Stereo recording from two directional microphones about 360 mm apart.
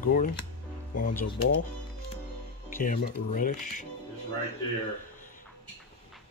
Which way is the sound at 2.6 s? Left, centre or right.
Left.